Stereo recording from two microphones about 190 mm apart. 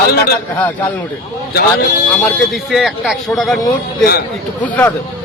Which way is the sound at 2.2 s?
Centre (ahead or behind).